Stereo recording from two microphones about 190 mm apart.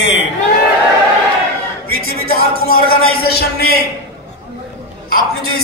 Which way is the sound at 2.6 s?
55° left (ahead or behind).